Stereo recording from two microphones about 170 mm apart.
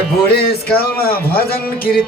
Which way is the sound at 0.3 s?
65° left (ahead or behind).